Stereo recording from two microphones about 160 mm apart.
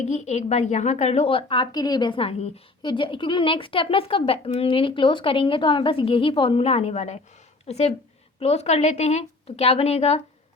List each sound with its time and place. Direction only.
0.1 s a woman's voice: 45° left (ahead or behind)